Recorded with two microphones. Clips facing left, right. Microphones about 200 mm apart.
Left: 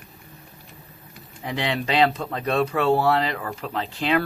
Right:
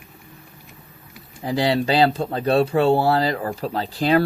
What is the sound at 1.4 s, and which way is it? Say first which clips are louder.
Speech: right 6 dB; 35° right (ahead or behind).